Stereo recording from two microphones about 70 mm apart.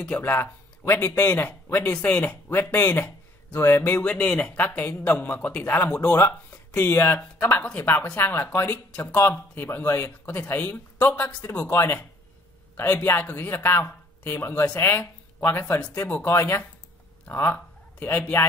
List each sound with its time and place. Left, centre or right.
0.2 s speech: left
7.2 s speech: centre
11.1 s speech: left
12.7 s speech: left